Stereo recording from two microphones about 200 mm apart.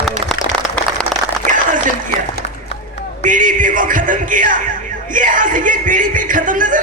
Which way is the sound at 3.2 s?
40° right (ahead or behind).